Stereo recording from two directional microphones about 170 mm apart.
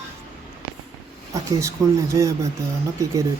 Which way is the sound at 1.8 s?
20° right (ahead or behind).